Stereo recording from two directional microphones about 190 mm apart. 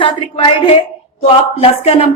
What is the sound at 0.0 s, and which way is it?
A woman's voice, 25° left (ahead or behind).